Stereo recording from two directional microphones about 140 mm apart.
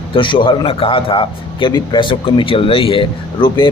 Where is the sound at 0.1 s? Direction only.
35° left (ahead or behind).